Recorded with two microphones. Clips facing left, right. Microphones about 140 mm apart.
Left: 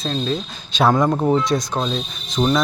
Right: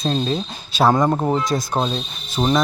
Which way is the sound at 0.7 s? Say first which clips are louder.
Even; 5° right (ahead or behind).